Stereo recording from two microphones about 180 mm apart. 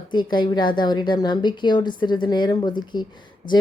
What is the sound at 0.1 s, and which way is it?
Speech, 25° left (ahead or behind).